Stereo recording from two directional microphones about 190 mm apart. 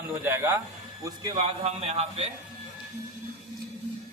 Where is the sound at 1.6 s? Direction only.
35° right (ahead or behind).